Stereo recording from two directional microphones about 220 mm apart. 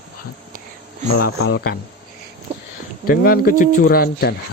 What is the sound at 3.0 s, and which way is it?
Speech, 40° left (ahead or behind).